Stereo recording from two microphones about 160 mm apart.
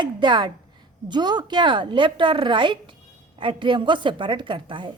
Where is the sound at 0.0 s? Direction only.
30° right (ahead or behind).